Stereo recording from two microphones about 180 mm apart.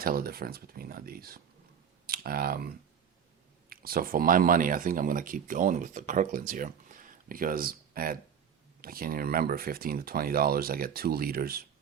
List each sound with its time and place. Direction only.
0.0 s speech: 55° right (ahead or behind)